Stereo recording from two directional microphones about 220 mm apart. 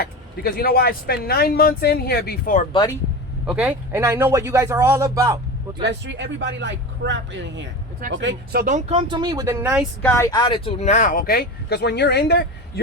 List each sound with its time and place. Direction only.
0.0 s speech: 45° left (ahead or behind)
3.4 s speech: 5° right (ahead or behind)
5.8 s speech: 55° right (ahead or behind)
8.6 s speech: 30° right (ahead or behind); by 9.8 s 10° right (ahead or behind)
10.0 s speech: 10° left (ahead or behind); by 12.8 s 45° left (ahead or behind)